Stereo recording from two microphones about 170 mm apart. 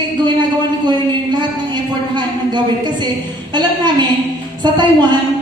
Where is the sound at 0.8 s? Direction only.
25° right (ahead or behind).